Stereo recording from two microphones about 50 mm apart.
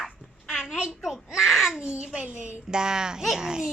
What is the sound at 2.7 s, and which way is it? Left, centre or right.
A woman's voice, centre.